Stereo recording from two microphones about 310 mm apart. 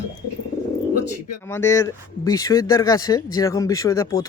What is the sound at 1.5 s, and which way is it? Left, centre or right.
Speech, centre.